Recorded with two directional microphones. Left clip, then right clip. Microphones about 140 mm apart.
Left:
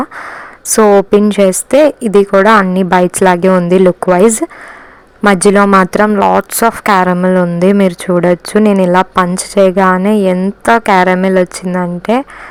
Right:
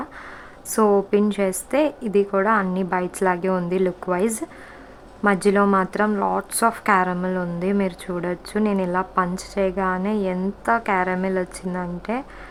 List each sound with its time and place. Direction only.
0.7 s speech: 45° left (ahead or behind)
6.1 s speech: 35° left (ahead or behind)